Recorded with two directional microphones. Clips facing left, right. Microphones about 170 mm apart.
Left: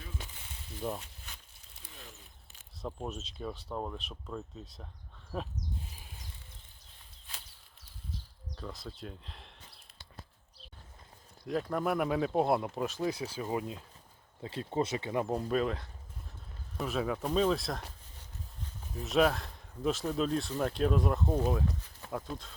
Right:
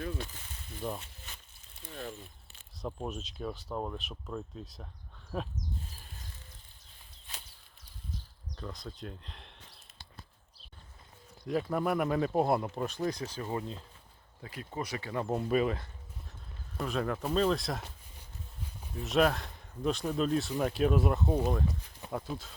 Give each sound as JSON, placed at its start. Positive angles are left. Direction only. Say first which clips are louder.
{"t": 0.8, "sound": "speech", "louder": "left 1 dB", "side_deg": 0}
{"t": 2.0, "sound": "a sound", "louder": "right 12 dB", "side_deg": -55}
{"t": 2.8, "sound": "speech", "louder": "right 1 dB", "side_deg": 0}
{"t": 8.5, "sound": "speech", "louder": "right 1 dB", "side_deg": 5}
{"t": 11.4, "sound": "speech", "louder": "right 1 dB", "side_deg": 0}
{"t": 14.4, "sound": "speech", "louder": "left 6 dB", "side_deg": 30}
{"t": 15.3, "sound": "speech", "louder": "right 5 dB", "side_deg": -5}
{"t": 18.9, "sound": "speech", "louder": "even", "side_deg": 0}